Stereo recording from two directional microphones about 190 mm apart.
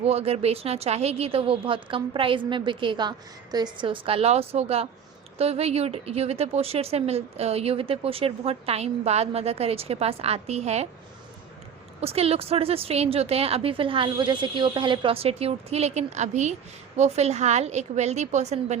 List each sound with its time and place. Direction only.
0.0 s a woman's voice: 30° right (ahead or behind)
11.9 s a woman's voice: 30° right (ahead or behind)